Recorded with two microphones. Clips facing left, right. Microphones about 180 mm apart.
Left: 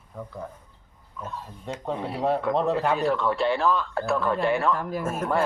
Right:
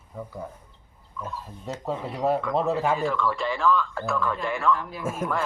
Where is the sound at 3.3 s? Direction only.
60° left (ahead or behind).